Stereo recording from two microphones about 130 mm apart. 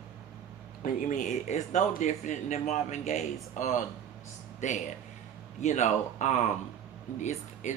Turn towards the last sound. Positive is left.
turn(degrees=65)  # may be behind; listen again after turning